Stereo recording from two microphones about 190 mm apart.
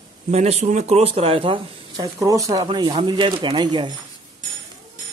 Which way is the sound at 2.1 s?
15° right (ahead or behind).